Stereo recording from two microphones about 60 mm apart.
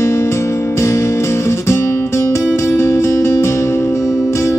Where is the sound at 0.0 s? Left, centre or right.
Left.